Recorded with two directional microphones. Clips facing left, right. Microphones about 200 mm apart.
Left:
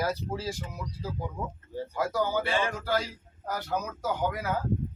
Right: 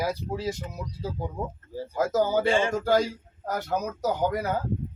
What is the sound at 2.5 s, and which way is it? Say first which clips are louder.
Speech: right 5 dB; 25° right (ahead or behind).